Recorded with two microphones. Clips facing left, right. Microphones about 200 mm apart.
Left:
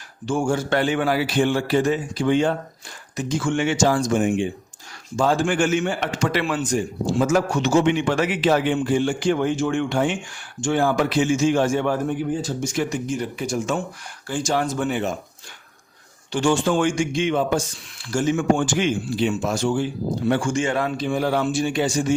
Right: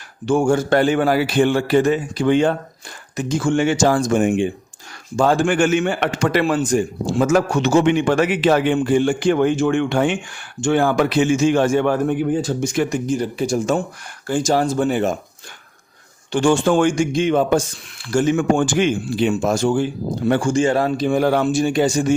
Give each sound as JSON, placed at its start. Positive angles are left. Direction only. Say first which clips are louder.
{"t": 0.3, "sound": "a man's voice", "louder": "right 6 dB", "side_deg": -60}
{"t": 3.2, "sound": "a man's voice", "louder": "right 3 dB", "side_deg": -50}
{"t": 3.4, "sound": "a man's voice", "louder": "right 4 dB", "side_deg": -40}
{"t": 6.4, "sound": "a man's voice", "louder": "right 5 dB", "side_deg": -40}
{"t": 7.2, "sound": "a man's voice", "louder": "right 4 dB", "side_deg": -65}
{"t": 13.1, "sound": "speech", "louder": "right 5 dB", "side_deg": -35}
{"t": 16.3, "sound": "a man's voice", "louder": "right 4 dB", "side_deg": -50}
{"t": 18.1, "sound": "a man's voice", "louder": "right 3 dB", "side_deg": -60}
{"t": 20.4, "sound": "a man's voice", "louder": "right 5 dB", "side_deg": -35}